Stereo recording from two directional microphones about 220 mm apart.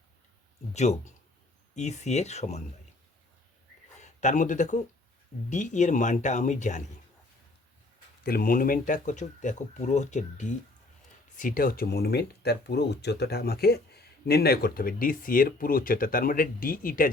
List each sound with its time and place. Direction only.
0.7 s speech: 30° left (ahead or behind)
4.0 s speech: 35° left (ahead or behind)
8.2 s speech: 45° left (ahead or behind)